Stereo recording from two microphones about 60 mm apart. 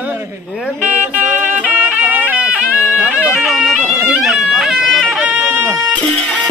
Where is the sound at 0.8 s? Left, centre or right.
Right.